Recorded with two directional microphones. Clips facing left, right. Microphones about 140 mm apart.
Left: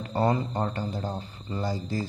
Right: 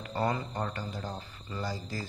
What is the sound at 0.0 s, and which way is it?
Speech, 30° left (ahead or behind).